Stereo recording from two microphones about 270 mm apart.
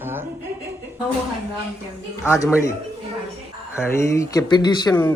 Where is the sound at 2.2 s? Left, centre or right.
Centre.